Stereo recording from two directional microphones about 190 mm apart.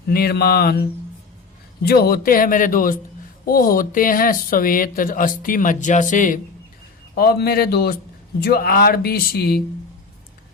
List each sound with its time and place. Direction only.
0.1 s a sound: 55° left (ahead or behind)
1.9 s speech: 55° left (ahead or behind)
7.2 s speech: 55° left (ahead or behind)